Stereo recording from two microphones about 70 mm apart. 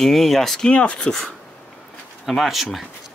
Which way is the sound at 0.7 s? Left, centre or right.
Centre.